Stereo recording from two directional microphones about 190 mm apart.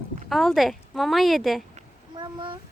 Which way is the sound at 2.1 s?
25° right (ahead or behind).